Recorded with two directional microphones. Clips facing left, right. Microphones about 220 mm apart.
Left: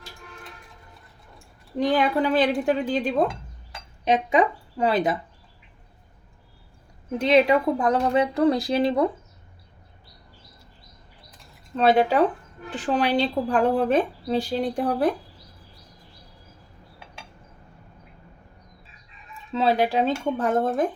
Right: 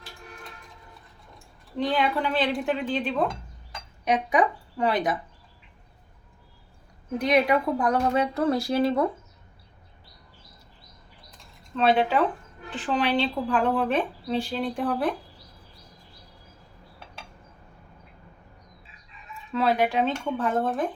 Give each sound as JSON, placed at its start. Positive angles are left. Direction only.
{"t": 1.8, "sound": "speech", "side_deg": 40}
{"t": 4.0, "sound": "speech", "side_deg": 25}
{"t": 7.2, "sound": "speech", "side_deg": 25}
{"t": 11.9, "sound": "speech", "side_deg": 40}
{"t": 19.5, "sound": "speech", "side_deg": 30}